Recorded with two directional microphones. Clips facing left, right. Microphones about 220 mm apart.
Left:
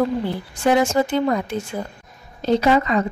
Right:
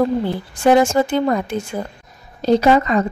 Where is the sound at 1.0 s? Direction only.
45° right (ahead or behind).